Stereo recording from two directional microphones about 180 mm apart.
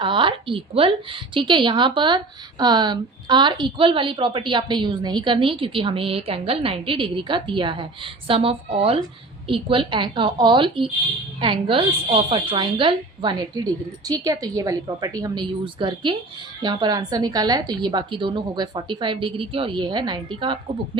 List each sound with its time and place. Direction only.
0.0 s a woman's voice: 30° right (ahead or behind)